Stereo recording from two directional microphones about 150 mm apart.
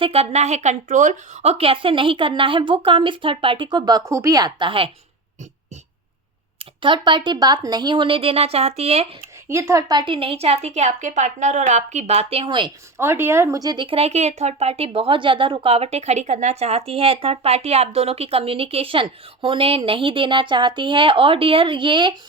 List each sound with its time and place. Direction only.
0.0 s speech: 40° right (ahead or behind)
6.6 s speech: 35° right (ahead or behind)
9.5 s a woman's voice: 20° right (ahead or behind)
13.0 s speech: 15° right (ahead or behind); by 22.1 s 35° right (ahead or behind)